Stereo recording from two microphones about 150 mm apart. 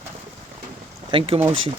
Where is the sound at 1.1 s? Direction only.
35° right (ahead or behind).